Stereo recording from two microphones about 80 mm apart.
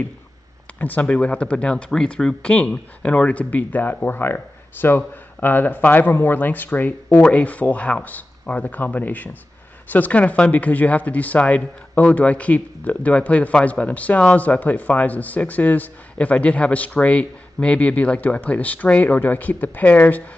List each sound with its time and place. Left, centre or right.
0.7 s speech: left